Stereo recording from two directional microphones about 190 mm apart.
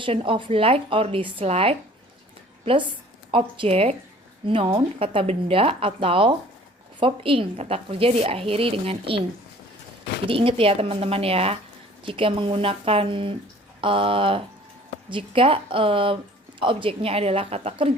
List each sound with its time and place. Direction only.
0.0 s a woman's voice: 30° right (ahead or behind)
10.2 s a woman's voice: 30° right (ahead or behind)